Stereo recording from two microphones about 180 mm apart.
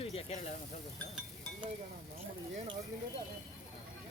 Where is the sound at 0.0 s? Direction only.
35° left (ahead or behind).